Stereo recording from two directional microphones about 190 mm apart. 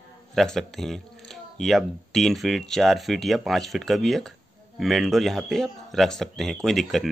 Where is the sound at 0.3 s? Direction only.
Centre (ahead or behind).